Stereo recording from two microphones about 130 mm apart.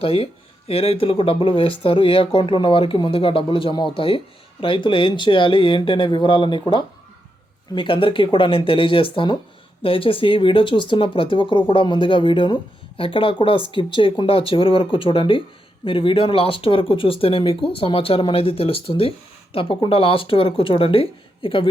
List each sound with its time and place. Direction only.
0.0 s speech: 45° left (ahead or behind)